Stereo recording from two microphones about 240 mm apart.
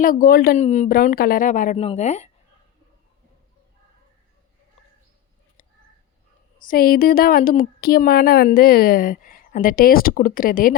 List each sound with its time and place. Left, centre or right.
0.0 s a woman's voice: left
6.7 s a woman's voice: left